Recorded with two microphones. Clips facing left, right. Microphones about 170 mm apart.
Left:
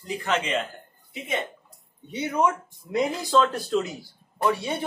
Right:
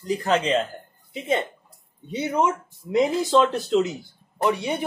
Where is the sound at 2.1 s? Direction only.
25° right (ahead or behind).